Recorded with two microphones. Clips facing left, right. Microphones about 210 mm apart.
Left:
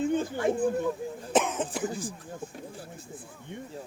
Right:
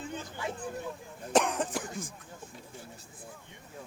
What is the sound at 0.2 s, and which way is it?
Speech, 50° left (ahead or behind).